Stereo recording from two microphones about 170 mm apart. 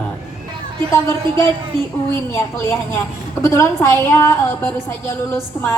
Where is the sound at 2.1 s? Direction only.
15° left (ahead or behind).